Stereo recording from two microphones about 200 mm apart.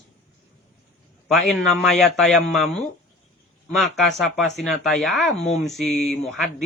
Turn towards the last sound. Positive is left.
turn(degrees=0)  # may be behind; listen again after turning